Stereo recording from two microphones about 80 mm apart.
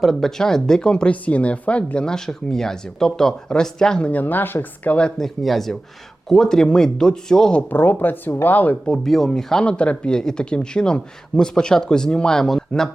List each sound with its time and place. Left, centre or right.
0.0 s speech: centre
4.1 s speech: left; by 7.6 s centre
7.7 s speech: left
8.9 s speech: centre